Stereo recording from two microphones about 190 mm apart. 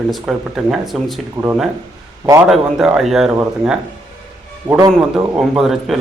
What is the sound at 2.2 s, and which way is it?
Speech, 15° right (ahead or behind).